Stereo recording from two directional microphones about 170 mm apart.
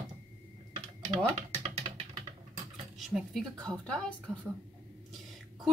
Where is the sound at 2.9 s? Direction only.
Centre (ahead or behind).